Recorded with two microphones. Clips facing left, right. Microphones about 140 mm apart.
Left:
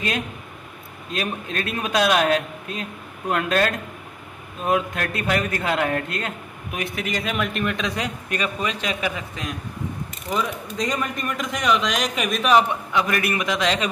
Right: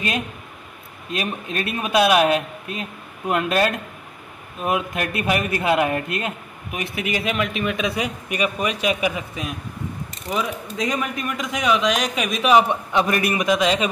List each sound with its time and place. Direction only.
1.1 s a man's voice: 5° right (ahead or behind)
12.9 s a man's voice: 20° right (ahead or behind)